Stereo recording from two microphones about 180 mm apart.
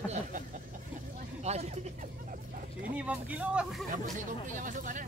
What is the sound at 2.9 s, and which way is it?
Speech, 5° right (ahead or behind).